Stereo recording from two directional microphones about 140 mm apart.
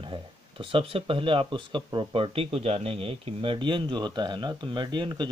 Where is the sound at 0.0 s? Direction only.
35° right (ahead or behind).